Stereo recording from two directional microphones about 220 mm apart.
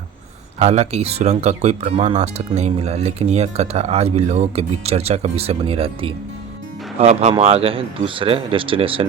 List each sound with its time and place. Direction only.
0.6 s speech: 30° right (ahead or behind)